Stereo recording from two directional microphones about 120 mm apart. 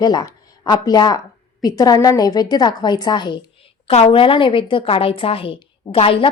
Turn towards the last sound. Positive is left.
turn(degrees=50)  # may be behind; listen again after turning